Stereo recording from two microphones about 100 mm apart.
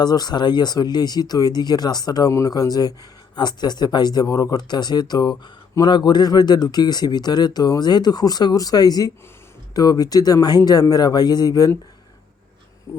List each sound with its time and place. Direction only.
0.0 s speech: 45° left (ahead or behind)
12.9 s speech: 30° left (ahead or behind)